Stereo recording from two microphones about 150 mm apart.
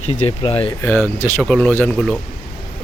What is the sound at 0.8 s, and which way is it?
Speech, 15° left (ahead or behind).